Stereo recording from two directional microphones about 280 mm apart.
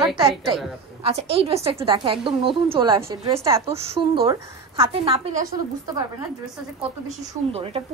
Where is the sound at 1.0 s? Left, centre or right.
Right.